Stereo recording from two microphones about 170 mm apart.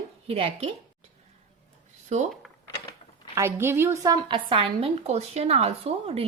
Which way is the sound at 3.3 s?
15° right (ahead or behind).